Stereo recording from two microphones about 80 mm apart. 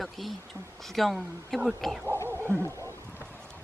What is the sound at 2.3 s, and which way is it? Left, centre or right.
Dog, right.